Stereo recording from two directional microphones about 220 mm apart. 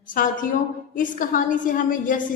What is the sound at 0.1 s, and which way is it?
A man's voice, 40° left (ahead or behind).